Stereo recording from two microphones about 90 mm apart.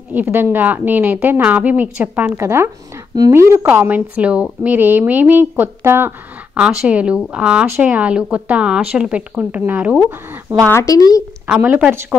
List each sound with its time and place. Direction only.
0.1 s a woman's voice: 20° right (ahead or behind)
2.3 s a woman's voice: 30° right (ahead or behind)
6.5 s speech: 10° right (ahead or behind)
10.7 s speech: 35° left (ahead or behind)
11.4 s speech: 15° right (ahead or behind)